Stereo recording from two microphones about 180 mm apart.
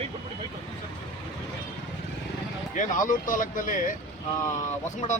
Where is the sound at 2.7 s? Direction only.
45° left (ahead or behind).